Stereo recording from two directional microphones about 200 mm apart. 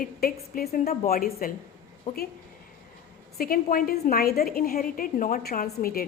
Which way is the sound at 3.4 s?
45° left (ahead or behind).